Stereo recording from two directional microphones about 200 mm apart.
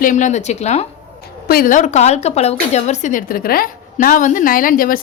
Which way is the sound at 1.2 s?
50° left (ahead or behind).